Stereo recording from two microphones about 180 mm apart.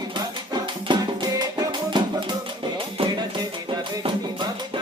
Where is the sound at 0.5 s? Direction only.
25° right (ahead or behind).